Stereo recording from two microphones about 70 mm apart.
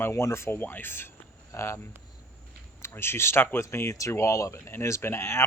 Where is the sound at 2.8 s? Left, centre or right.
Left.